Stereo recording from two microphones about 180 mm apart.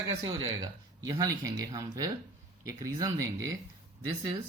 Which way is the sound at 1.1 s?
20° right (ahead or behind).